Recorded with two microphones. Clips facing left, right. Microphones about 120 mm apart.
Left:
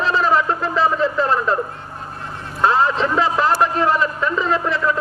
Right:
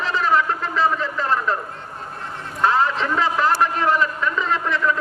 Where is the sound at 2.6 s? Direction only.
20° left (ahead or behind).